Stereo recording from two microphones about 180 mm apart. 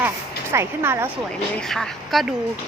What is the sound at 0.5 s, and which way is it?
Speech, 15° right (ahead or behind).